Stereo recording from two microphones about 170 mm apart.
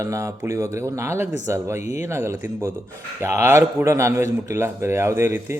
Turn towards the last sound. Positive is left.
turn(degrees=-15)  # may be behind; listen again after turning